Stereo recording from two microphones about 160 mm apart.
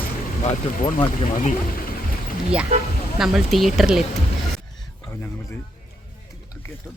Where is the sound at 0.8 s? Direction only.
30° left (ahead or behind).